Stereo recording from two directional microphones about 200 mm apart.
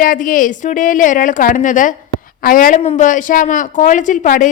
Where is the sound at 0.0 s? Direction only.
45° left (ahead or behind).